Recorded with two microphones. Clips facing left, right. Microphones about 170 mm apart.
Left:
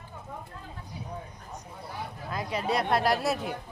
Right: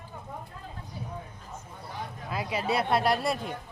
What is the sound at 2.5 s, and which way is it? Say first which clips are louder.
Speech: even; 5° right (ahead or behind).